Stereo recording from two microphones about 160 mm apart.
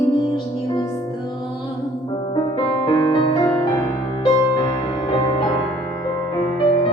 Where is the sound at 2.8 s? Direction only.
30° left (ahead or behind).